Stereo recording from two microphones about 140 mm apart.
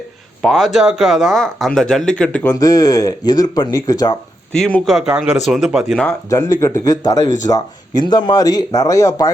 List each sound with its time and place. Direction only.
0.4 s speech: centre (ahead or behind)
2.5 s speech: 25° left (ahead or behind)
4.5 s speech: 5° left (ahead or behind)
6.3 s speech: 25° left (ahead or behind)